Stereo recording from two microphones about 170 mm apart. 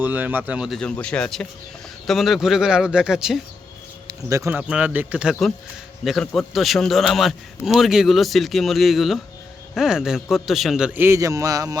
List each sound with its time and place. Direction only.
0.0 s a man's voice: 10° right (ahead or behind)
4.0 s a man's voice: 20° right (ahead or behind)